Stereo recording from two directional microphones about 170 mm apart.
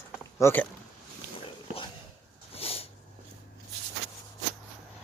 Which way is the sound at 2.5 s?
35° left (ahead or behind).